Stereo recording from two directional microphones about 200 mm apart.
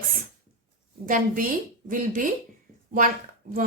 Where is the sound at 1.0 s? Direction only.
40° right (ahead or behind).